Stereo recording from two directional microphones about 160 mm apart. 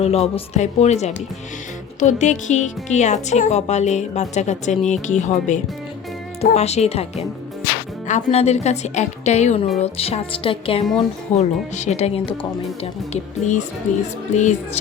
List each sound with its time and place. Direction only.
0.0 s a woman's voice: 40° left (ahead or behind)
13.4 s a woman's voice: 50° left (ahead or behind)